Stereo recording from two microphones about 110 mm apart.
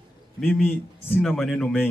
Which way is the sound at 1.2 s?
Centre (ahead or behind).